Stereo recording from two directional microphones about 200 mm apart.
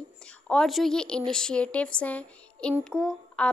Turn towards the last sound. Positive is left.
turn(degrees=5)  # may be behind; listen again after turning